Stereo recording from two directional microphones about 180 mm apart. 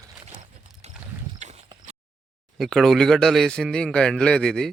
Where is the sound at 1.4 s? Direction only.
40° right (ahead or behind).